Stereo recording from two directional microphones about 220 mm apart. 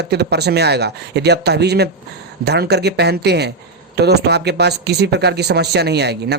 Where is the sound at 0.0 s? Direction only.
50° right (ahead or behind).